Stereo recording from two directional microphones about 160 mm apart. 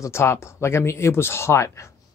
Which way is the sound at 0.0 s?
15° left (ahead or behind).